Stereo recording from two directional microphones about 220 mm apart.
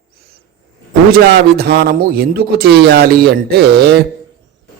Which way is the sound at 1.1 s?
45° right (ahead or behind).